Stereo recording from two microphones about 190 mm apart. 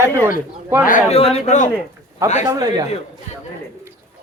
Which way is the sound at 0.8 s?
45° left (ahead or behind).